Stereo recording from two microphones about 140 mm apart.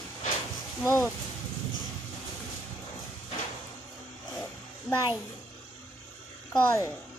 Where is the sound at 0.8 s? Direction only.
20° left (ahead or behind).